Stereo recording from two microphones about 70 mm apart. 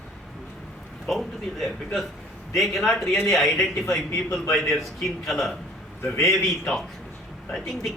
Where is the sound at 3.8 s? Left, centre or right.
Centre.